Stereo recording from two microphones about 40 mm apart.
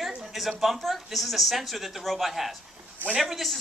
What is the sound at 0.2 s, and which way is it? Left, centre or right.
Speech, centre.